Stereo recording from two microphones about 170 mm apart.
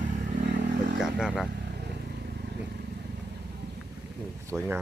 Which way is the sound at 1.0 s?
5° right (ahead or behind).